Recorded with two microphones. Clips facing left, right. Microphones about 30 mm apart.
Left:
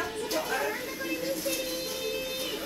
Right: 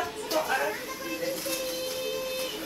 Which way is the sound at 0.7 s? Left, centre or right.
Centre.